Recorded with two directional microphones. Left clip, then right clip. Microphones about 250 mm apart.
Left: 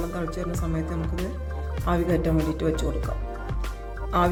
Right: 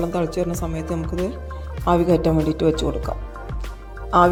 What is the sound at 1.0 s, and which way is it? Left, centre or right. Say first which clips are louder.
Speech: right 6 dB; centre.